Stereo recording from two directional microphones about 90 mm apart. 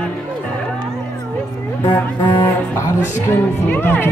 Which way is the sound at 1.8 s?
25° left (ahead or behind).